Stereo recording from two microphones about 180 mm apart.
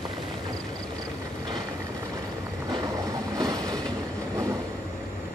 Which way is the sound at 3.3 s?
20° right (ahead or behind).